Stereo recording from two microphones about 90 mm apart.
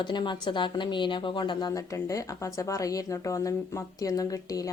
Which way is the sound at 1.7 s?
40° left (ahead or behind).